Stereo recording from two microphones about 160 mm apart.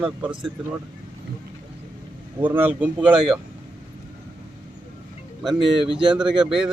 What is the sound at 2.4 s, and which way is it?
Speech, 10° right (ahead or behind).